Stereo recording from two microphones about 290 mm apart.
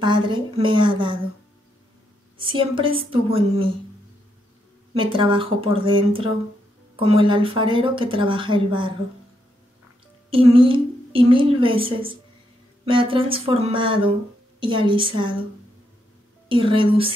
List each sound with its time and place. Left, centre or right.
0.0 s a woman's voice: centre
2.3 s a woman's voice: centre
4.9 s a woman's voice: centre
10.3 s a woman's voice: centre
16.4 s a woman's voice: centre